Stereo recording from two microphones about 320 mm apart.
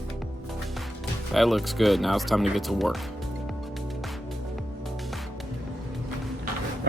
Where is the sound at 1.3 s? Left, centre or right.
Centre.